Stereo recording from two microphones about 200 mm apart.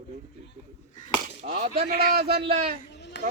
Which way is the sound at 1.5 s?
50° right (ahead or behind).